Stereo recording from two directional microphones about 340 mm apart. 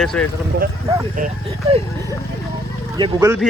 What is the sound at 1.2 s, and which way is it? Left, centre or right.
Speech, right.